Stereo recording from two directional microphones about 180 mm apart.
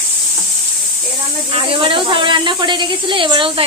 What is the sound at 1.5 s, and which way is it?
Speech, 30° right (ahead or behind).